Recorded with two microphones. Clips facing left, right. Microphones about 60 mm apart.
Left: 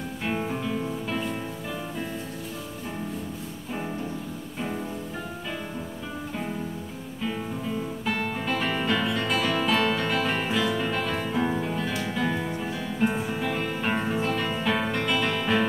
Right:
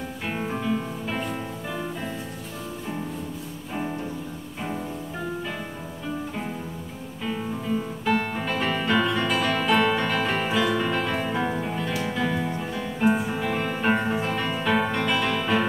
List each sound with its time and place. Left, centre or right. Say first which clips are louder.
0.3 s music: right 2 dB; centre
7.2 s music: right 3 dB; centre
9.1 s music: right 2 dB; centre
9.4 s music: right 2 dB; centre
14.4 s music: right 2 dB; centre